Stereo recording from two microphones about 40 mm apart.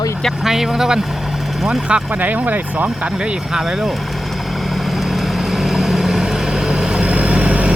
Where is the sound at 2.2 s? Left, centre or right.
Right.